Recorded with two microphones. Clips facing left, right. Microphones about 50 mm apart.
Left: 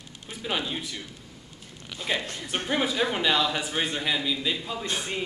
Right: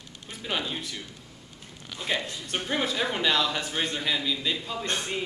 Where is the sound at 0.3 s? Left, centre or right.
Centre.